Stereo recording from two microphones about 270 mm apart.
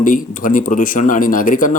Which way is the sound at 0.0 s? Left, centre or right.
Left.